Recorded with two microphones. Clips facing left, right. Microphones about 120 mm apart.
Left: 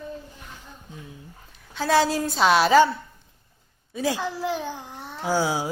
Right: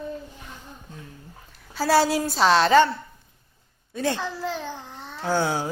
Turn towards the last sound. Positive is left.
turn(degrees=10)  # may be behind; listen again after turning